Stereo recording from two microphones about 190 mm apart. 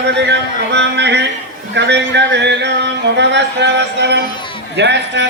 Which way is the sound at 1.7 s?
65° right (ahead or behind).